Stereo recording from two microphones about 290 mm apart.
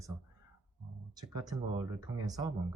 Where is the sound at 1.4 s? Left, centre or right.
Centre.